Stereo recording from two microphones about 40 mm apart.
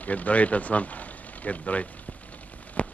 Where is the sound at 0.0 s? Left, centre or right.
Left.